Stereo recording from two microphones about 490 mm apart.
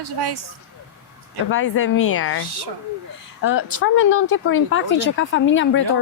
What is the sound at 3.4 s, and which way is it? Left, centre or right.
Speech, left.